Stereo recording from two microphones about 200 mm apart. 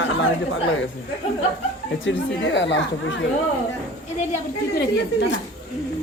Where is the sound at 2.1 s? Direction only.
65° left (ahead or behind).